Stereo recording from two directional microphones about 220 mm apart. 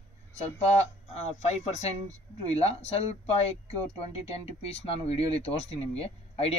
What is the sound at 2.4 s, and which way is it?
Speech, 25° left (ahead or behind).